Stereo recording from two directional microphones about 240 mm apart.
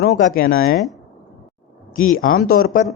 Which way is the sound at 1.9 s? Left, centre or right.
Left.